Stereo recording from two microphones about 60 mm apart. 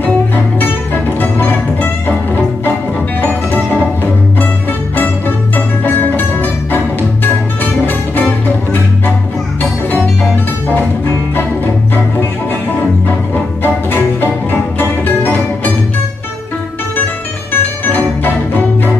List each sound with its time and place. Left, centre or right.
1.2 s music: left
5.9 s music: left
14.2 s music: left
16.9 s music: left